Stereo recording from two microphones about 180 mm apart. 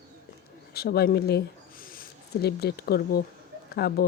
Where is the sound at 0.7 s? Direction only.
60° left (ahead or behind).